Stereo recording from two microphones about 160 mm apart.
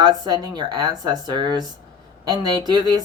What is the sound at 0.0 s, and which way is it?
Speech, 25° right (ahead or behind).